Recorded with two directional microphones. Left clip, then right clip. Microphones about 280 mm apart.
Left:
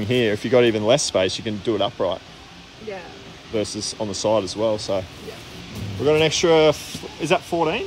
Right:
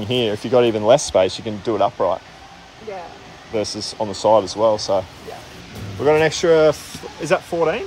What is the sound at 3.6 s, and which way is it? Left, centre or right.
Speech, centre.